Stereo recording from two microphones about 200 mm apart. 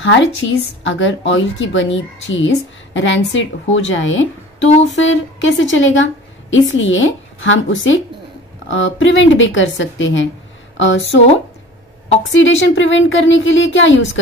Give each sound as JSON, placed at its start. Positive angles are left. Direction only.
{"t": 0.0, "sound": "a woman's voice", "side_deg": 70}